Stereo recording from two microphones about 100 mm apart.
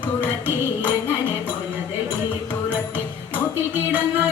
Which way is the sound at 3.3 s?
15° right (ahead or behind).